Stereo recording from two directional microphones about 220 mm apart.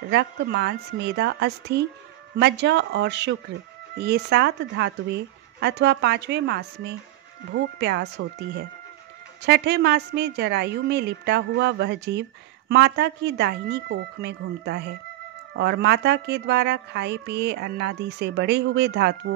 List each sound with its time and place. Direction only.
0.0 s a woman's voice: 50° right (ahead or behind)